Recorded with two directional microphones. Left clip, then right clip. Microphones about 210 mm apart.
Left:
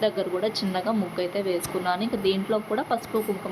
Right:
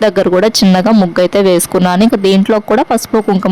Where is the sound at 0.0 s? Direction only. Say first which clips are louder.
Right 15 dB; 50° right (ahead or behind).